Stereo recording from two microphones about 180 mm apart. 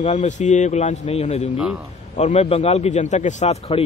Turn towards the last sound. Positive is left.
turn(degrees=35)  # may be behind; listen again after turning